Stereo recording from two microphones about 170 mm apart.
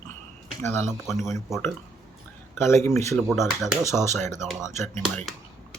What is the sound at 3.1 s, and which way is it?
Speech, centre (ahead or behind).